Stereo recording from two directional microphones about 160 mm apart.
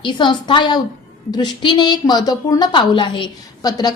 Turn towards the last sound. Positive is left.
turn(degrees=25)  # may be behind; listen again after turning